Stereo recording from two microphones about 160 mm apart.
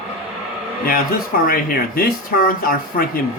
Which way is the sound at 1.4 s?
65° left (ahead or behind).